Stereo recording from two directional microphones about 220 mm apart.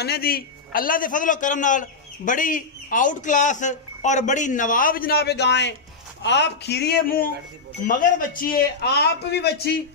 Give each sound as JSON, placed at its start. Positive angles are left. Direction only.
{"t": 0.0, "sound": "a man's voice", "side_deg": 45}